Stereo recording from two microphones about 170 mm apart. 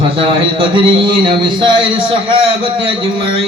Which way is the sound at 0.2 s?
30° right (ahead or behind).